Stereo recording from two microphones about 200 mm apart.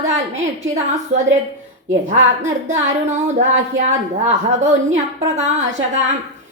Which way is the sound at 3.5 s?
35° right (ahead or behind).